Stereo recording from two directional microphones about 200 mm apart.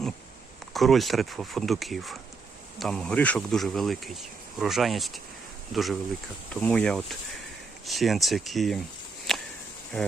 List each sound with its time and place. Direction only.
0.7 s speech: centre (ahead or behind)
9.3 s whip: centre (ahead or behind)
9.9 s speech: 10° left (ahead or behind)